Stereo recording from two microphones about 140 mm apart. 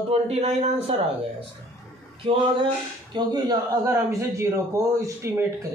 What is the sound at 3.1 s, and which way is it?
Speech, 30° right (ahead or behind).